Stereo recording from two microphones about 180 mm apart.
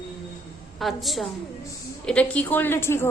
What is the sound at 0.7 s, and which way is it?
A woman's voice, centre (ahead or behind).